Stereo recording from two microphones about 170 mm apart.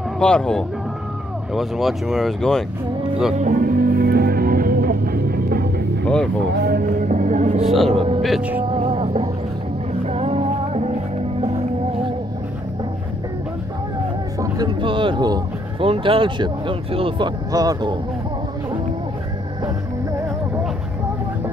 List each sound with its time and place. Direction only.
0.2 s speech: 5° left (ahead or behind)
3.3 s music: 50° right (ahead or behind)
7.6 s speech: centre (ahead or behind)
7.9 s speech: 35° right (ahead or behind)
8.2 s speech: 5° right (ahead or behind)
8.7 s music: 35° right (ahead or behind)
14.4 s speech: 25° right (ahead or behind)